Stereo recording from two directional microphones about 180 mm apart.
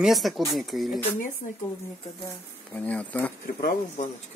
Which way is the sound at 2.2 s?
10° left (ahead or behind).